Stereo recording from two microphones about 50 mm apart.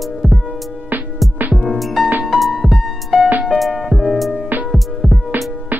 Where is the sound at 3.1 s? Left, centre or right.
Right.